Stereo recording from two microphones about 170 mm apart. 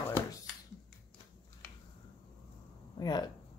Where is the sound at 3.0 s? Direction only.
25° left (ahead or behind).